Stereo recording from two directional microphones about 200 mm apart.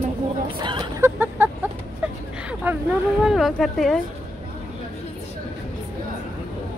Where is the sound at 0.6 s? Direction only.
20° right (ahead or behind).